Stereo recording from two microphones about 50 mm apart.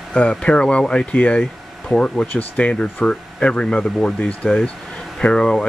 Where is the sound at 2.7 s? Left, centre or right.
Centre.